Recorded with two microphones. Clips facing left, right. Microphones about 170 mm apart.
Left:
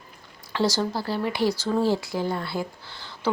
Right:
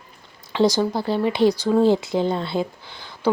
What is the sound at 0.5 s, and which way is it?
Speech, 15° right (ahead or behind).